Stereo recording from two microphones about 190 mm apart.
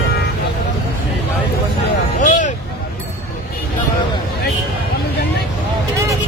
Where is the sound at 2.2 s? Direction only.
40° left (ahead or behind).